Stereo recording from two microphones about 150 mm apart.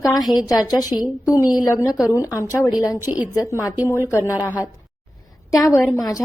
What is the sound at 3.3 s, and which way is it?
Speech, 20° left (ahead or behind).